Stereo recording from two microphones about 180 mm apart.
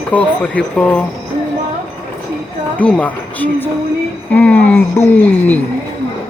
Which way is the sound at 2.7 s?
5° left (ahead or behind).